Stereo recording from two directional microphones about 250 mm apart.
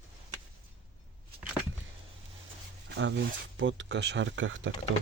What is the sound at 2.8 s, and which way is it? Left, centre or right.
Speech, right.